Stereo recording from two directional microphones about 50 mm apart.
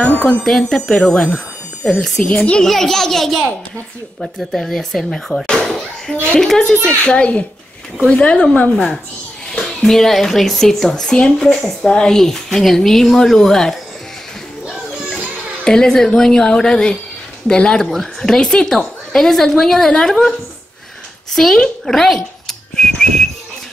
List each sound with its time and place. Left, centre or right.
0.4 s a woman's voice: centre
2.2 s a woman's voice: left
2.6 s a woman's voice: centre
7.1 s a woman's voice: left
9.5 s a woman's voice: centre
15.6 s a woman's voice: centre